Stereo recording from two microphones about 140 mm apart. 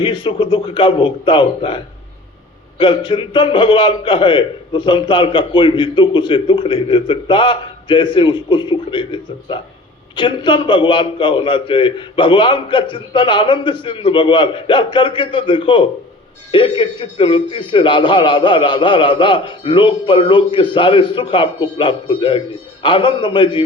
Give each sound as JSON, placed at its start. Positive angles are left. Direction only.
{"t": 0.0, "sound": "a man's voice", "side_deg": 35}